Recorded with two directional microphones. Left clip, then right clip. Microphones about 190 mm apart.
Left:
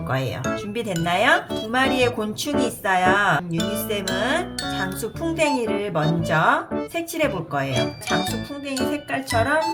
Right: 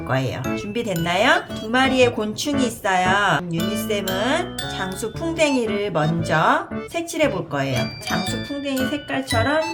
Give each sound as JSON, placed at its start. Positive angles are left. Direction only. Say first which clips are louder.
{"t": 0.1, "sound": "speech", "louder": "right 1 dB", "side_deg": -5}